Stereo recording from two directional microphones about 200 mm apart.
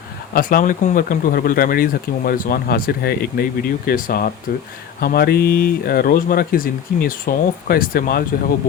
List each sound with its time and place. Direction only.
0.3 s speech: 45° left (ahead or behind)